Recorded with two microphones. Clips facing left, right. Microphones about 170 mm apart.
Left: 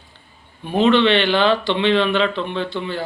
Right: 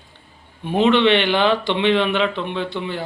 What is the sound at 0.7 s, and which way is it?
Speech, 15° right (ahead or behind).